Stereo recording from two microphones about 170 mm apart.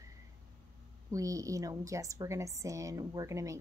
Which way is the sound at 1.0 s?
20° right (ahead or behind).